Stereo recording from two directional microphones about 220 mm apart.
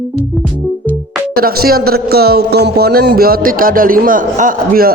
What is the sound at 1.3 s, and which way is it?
Speech, 45° right (ahead or behind).